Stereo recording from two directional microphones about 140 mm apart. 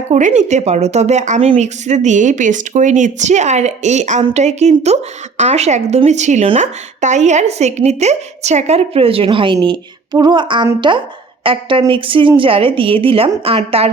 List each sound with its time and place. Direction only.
0.1 s a woman's voice: 60° right (ahead or behind)